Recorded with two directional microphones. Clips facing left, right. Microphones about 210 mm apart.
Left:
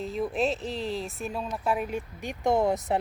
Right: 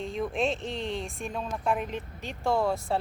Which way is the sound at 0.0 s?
5° left (ahead or behind).